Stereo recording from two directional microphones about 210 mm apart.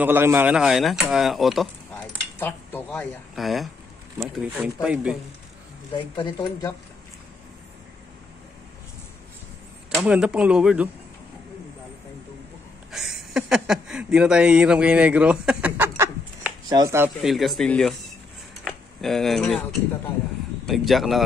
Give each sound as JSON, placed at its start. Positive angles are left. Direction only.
{"t": 0.0, "sound": "speech", "side_deg": -10}
{"t": 6.1, "sound": "speech", "side_deg": 20}
{"t": 9.8, "sound": "speech", "side_deg": -5}
{"t": 12.9, "sound": "speech", "side_deg": -5}
{"t": 17.2, "sound": "speech", "side_deg": 0}
{"t": 18.6, "sound": "a sound", "side_deg": 0}
{"t": 20.6, "sound": "speech", "side_deg": 0}